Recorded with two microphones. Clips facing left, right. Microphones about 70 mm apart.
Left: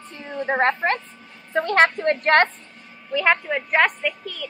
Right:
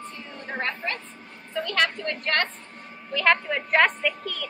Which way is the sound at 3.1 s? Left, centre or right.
Centre.